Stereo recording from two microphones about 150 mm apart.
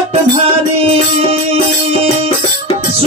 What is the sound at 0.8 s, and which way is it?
Music, 40° right (ahead or behind).